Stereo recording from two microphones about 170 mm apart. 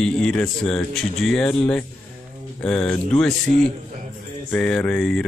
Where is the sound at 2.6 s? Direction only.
5° left (ahead or behind).